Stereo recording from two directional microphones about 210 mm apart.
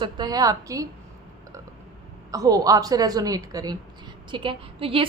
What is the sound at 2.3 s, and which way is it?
A woman's voice, 15° right (ahead or behind).